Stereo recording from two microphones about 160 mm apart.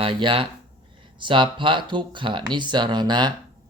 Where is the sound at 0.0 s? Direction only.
30° right (ahead or behind).